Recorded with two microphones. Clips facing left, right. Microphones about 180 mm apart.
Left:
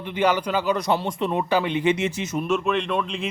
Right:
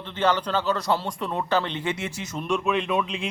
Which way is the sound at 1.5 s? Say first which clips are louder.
Left 4 dB; 10° left (ahead or behind).